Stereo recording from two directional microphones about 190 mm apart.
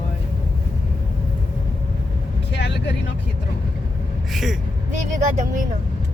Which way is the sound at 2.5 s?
65° left (ahead or behind).